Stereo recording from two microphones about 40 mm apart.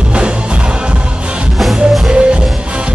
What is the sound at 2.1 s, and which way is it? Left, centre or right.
Music, right.